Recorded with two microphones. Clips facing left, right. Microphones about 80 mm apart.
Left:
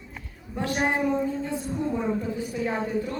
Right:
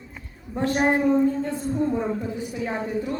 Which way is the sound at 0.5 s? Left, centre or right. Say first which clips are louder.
Right 5 dB; right.